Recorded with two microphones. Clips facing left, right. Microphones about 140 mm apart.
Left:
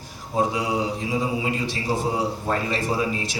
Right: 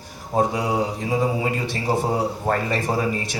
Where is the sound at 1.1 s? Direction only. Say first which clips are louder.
Right 4 dB; 50° right (ahead or behind).